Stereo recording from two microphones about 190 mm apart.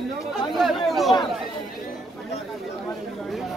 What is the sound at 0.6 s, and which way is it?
Chatter, centre (ahead or behind).